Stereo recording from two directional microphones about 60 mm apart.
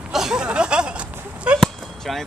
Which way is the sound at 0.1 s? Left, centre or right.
Centre.